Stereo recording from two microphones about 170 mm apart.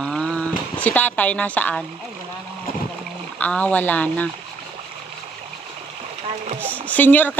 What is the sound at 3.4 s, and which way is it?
Speech, 10° left (ahead or behind).